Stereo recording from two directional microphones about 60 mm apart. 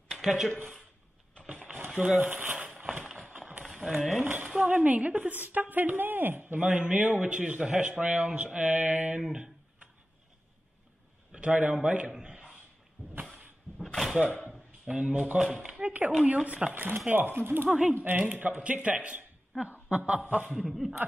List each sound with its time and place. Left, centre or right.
0.1 s a sound: centre
2.0 s speech: centre
2.9 s run: centre
3.3 s run: right
3.6 s a sound: centre
4.2 s a woman's voice: right
11.3 s a man's voice: centre
12.2 s a sound: centre
13.9 s a sound: centre
15.0 s a woman's voice: right
16.7 s speech: right
17.6 s a man's voice: centre
17.9 s a woman's voice: right
20.5 s a man's voice: centre